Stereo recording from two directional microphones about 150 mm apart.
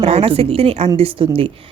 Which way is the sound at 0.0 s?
40° right (ahead or behind).